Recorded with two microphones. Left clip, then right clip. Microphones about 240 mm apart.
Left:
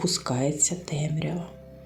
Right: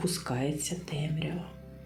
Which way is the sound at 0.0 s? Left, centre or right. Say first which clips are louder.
Left 6 dB; centre.